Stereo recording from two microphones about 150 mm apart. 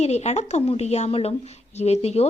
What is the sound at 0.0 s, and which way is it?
A woman's voice, 45° left (ahead or behind).